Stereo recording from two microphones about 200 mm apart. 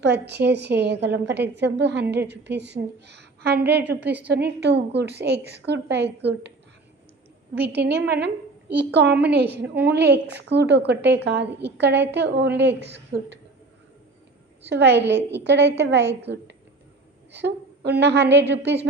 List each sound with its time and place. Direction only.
0.0 s a woman's voice: 60° right (ahead or behind)
7.5 s a woman's voice: 55° right (ahead or behind)
14.6 s a woman's voice: 60° right (ahead or behind)
17.3 s a woman's voice: 60° right (ahead or behind)